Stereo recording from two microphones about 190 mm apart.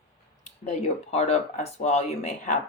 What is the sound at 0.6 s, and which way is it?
Speech, 35° left (ahead or behind).